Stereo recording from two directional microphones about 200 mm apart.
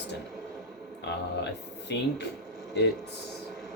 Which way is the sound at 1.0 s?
60° left (ahead or behind).